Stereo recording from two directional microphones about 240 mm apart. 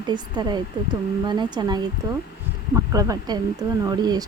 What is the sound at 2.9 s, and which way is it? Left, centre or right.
Speech, centre.